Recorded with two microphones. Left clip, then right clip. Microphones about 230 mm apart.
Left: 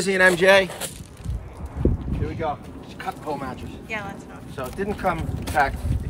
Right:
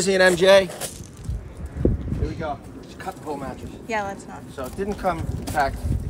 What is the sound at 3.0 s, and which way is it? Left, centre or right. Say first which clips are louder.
Speech: left 2 dB; centre.